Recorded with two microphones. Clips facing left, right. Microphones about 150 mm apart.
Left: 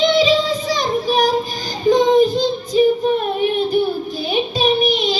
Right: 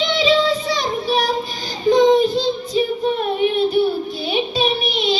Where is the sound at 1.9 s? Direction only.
45° left (ahead or behind).